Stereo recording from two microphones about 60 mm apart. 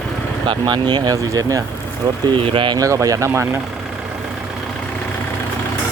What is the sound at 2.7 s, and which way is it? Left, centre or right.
Speech, right.